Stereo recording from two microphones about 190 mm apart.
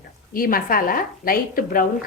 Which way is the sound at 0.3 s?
50° left (ahead or behind).